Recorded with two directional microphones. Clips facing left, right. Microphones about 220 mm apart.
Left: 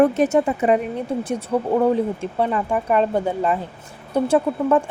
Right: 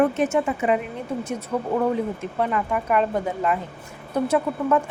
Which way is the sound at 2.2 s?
30° left (ahead or behind).